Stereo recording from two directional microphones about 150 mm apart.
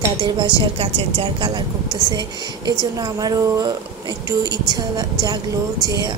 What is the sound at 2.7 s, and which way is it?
A woman's voice, 25° right (ahead or behind).